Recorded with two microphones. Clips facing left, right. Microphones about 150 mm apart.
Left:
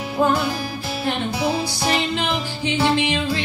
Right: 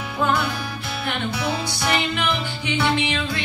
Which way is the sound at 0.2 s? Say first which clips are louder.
Left 3 dB; 30° left (ahead or behind).